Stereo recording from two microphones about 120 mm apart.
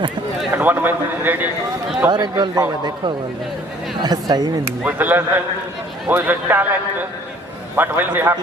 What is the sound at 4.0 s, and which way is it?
Speech, 35° right (ahead or behind).